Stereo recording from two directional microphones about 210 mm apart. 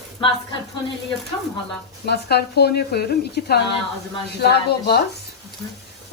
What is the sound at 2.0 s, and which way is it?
Speech, 50° left (ahead or behind).